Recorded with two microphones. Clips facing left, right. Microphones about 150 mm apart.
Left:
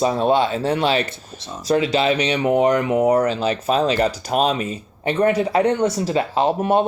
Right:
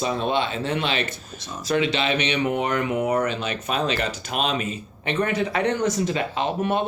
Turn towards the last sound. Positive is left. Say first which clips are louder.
# left 6 dB
turn(degrees=35)  # may be behind; listen again after turning